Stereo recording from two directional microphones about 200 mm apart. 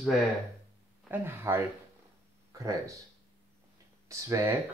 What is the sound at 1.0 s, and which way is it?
Speech, 10° right (ahead or behind).